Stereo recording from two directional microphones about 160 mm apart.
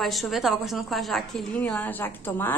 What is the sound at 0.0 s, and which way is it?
A woman's voice, centre (ahead or behind).